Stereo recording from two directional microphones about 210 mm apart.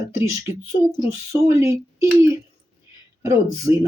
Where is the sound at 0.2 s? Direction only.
10° right (ahead or behind).